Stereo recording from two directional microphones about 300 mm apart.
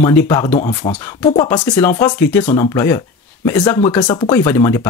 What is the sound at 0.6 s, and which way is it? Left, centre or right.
Speech, centre.